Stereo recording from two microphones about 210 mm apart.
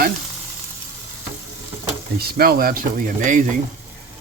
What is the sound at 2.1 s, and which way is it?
Speech, 45° right (ahead or behind).